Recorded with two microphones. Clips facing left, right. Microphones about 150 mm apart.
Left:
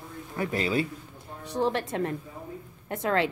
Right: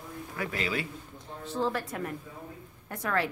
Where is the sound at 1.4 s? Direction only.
20° left (ahead or behind).